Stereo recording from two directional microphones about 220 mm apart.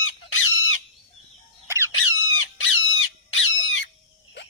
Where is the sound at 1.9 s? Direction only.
65° left (ahead or behind).